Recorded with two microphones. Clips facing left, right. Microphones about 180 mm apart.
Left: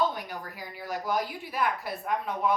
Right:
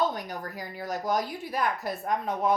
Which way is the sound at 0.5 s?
40° right (ahead or behind).